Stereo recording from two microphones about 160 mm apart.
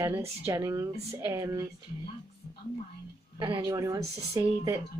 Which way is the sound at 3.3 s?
30° right (ahead or behind).